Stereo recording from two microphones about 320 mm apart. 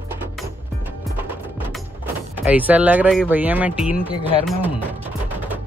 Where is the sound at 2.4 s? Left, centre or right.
Centre.